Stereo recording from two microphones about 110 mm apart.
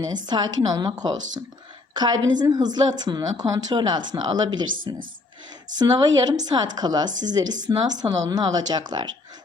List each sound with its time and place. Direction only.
0.0 s a woman's voice: 40° right (ahead or behind)